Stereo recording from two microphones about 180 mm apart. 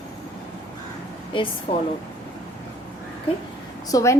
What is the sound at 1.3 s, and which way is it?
Speech, 30° left (ahead or behind).